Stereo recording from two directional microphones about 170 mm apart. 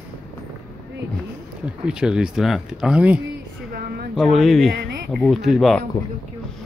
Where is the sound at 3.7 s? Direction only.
65° right (ahead or behind).